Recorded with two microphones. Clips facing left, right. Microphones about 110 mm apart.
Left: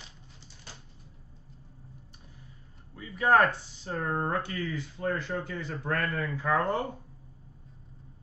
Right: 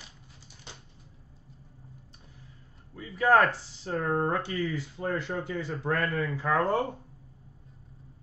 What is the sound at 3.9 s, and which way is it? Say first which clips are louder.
Speech: right 3 dB; 30° right (ahead or behind).